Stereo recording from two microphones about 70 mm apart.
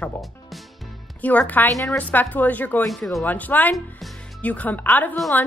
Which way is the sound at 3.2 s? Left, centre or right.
Left.